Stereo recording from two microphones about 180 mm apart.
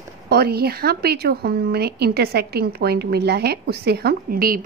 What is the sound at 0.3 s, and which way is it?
Speech, 60° right (ahead or behind).